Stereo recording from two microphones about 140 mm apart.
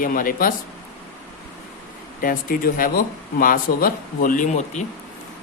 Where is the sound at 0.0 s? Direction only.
85° left.